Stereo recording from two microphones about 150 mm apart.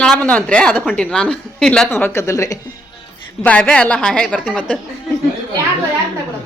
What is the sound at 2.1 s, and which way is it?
Speech, 20° left (ahead or behind).